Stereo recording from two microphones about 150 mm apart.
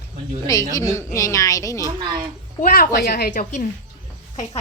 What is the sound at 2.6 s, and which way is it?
Speech, 65° left (ahead or behind).